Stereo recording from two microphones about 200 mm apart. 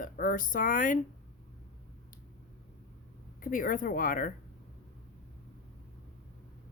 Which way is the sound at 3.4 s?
45° left (ahead or behind).